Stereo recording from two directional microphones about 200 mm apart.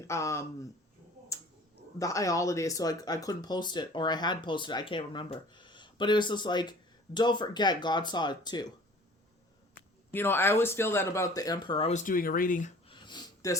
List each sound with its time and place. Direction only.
0.0 s speech: 15° left (ahead or behind)
2.0 s speech: 15° left (ahead or behind)
10.1 s speech: 10° left (ahead or behind); by 12.7 s 40° left (ahead or behind)
12.9 s a sound: 20° left (ahead or behind)